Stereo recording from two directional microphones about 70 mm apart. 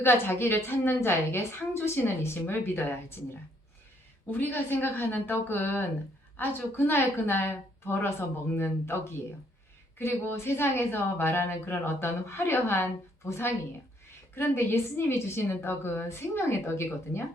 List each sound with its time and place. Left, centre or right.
0.0 s speech: left
4.3 s a woman's voice: left